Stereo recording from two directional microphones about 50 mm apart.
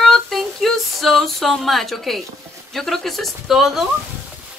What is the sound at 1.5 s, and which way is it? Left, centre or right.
Speech, centre.